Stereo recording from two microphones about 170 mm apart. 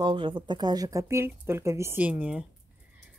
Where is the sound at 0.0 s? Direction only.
30° right (ahead or behind); by 2.4 s 10° right (ahead or behind).